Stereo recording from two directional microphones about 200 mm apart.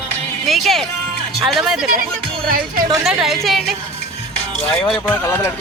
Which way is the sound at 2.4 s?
45° right (ahead or behind).